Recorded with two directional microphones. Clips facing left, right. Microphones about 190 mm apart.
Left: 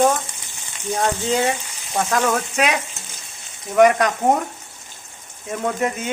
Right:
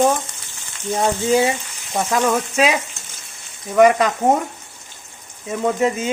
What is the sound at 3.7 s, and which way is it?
Sizzle, centre (ahead or behind).